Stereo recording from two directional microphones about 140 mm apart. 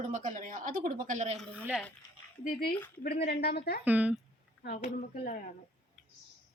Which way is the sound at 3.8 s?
10° right (ahead or behind).